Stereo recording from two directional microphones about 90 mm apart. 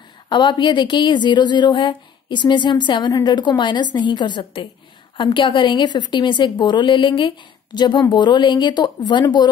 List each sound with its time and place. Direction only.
0.3 s a woman's voice: 60° left (ahead or behind)